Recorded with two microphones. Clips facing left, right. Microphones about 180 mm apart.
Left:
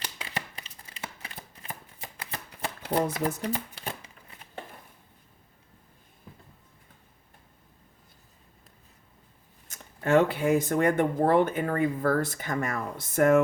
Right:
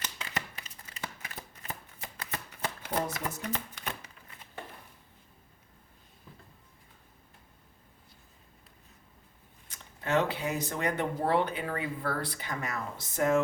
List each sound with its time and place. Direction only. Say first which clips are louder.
0.3 s a sound: left 1 dB; 30° left (ahead or behind)
2.3 s shuffling cards: left 1 dB; 35° left (ahead or behind)
9.6 s speech: left 7 dB; 45° left (ahead or behind)